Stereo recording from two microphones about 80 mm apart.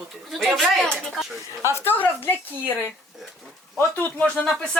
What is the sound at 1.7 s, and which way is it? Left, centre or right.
Speech, left.